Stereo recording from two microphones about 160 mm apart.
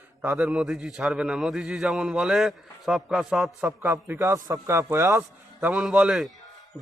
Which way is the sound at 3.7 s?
15° right (ahead or behind).